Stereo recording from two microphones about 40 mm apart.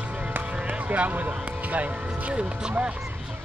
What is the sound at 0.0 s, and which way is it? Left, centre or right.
Music, right.